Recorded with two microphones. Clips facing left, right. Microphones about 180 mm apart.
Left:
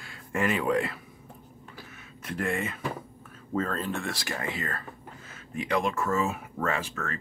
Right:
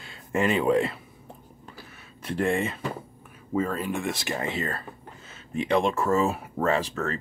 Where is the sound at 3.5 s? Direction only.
10° right (ahead or behind).